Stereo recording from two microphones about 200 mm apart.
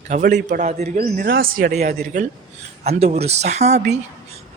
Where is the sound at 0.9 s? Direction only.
45° right (ahead or behind).